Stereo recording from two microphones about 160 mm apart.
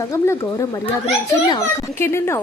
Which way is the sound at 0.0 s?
20° left (ahead or behind).